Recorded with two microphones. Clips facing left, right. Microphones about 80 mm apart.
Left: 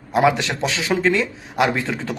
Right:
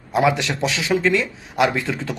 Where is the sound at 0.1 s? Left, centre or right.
Left.